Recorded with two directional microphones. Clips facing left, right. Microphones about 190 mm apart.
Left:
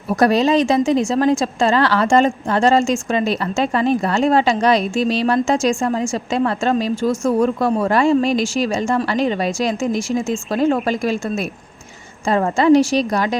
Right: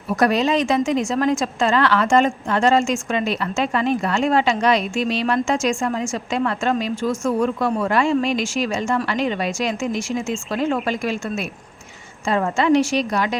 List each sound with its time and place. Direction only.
0.1 s a woman's voice: 35° left (ahead or behind)